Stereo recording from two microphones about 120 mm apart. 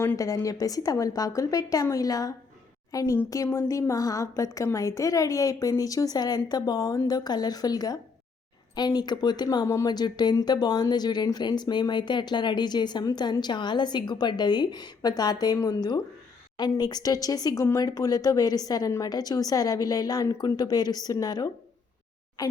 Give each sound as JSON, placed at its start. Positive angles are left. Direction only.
{"t": 0.2, "sound": "a woman's voice", "side_deg": 30}